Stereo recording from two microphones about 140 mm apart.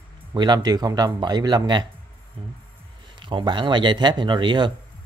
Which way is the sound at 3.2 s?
35° right (ahead or behind).